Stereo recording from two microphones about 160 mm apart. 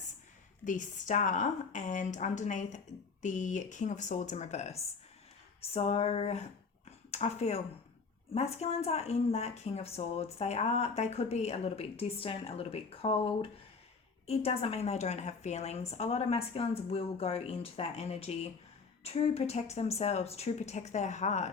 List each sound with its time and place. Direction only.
0.6 s a woman's voice: 55° left (ahead or behind)